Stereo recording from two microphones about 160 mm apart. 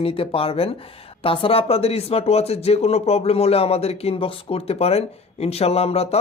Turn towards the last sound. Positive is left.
turn(degrees=40)  # may be behind; listen again after turning